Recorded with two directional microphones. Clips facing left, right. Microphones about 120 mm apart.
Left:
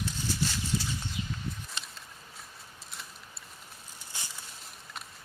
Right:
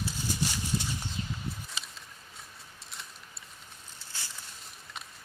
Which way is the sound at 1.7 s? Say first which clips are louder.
Even; centre (ahead or behind).